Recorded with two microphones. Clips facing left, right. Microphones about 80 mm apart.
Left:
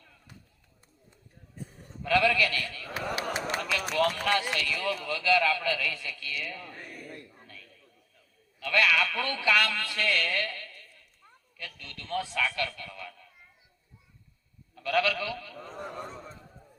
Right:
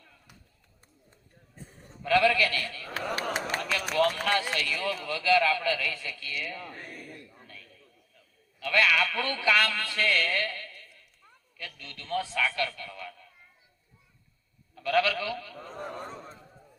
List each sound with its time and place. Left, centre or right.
2.0 s a man's voice: right
3.5 s run: right
4.5 s a man's voice: right
7.4 s a sound: right
8.6 s a man's voice: right
11.5 s a sound: right
14.8 s sheep: right